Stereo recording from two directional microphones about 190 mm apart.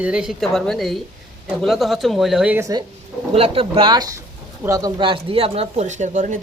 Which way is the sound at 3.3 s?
30° right (ahead or behind).